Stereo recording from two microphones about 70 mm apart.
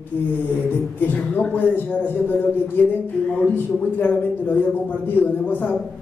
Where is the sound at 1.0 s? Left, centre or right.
Left.